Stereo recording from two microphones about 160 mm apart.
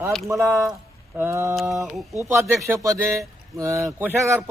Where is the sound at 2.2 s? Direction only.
15° right (ahead or behind).